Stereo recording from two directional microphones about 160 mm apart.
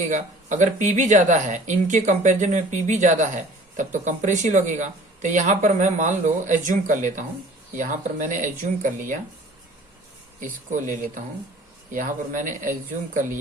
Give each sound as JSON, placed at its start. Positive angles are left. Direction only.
{"t": 0.0, "sound": "speech", "side_deg": -50}
{"t": 10.4, "sound": "speech", "side_deg": -55}